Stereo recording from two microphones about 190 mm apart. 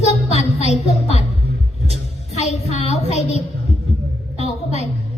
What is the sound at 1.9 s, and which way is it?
A woman's voice, 35° left (ahead or behind).